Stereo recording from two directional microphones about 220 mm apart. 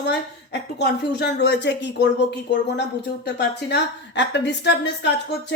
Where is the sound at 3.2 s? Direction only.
50° left (ahead or behind).